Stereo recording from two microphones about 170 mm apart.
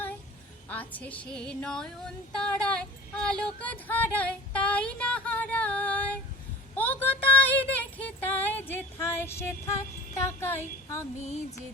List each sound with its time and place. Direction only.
0.7 s speech: 10° left (ahead or behind)
6.7 s a sound: 10° left (ahead or behind)
11.2 s music: 45° left (ahead or behind)